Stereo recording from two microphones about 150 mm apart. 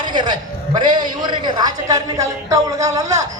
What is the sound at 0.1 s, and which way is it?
A man's voice, 30° right (ahead or behind).